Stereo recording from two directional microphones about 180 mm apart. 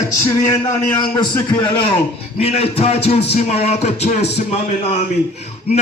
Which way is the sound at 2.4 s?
35° left (ahead or behind).